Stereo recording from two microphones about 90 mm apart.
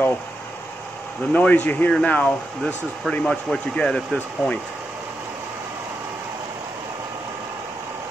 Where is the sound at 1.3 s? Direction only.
20° left (ahead or behind).